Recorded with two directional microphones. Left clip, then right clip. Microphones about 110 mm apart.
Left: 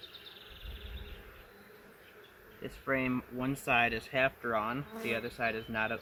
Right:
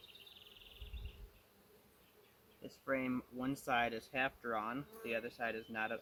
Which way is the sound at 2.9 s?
35° left (ahead or behind).